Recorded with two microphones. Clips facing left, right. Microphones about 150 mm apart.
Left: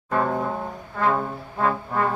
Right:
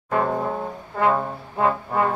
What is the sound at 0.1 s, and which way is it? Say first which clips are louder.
Brass instrument: right 1 dB; 10° right (ahead or behind).